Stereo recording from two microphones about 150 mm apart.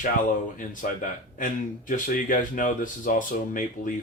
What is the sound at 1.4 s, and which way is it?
Speech, 65° left (ahead or behind).